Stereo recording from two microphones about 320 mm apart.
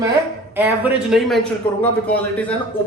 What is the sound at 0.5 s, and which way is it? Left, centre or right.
Speech, centre.